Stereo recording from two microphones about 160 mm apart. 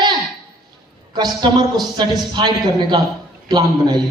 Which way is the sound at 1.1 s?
25° right (ahead or behind).